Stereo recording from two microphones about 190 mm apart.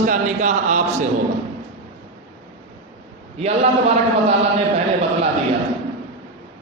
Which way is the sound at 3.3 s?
35° right (ahead or behind).